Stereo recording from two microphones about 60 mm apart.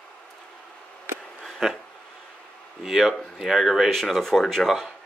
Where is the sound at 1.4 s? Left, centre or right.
Centre.